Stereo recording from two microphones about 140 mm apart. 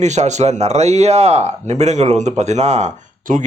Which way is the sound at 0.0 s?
55° right (ahead or behind).